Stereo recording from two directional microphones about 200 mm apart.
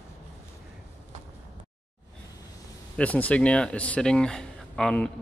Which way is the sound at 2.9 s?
5° left (ahead or behind).